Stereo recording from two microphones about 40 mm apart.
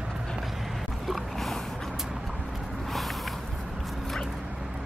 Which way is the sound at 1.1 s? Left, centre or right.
Centre.